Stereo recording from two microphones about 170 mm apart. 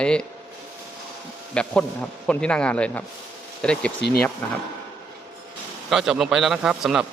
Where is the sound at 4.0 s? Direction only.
75° left (ahead or behind).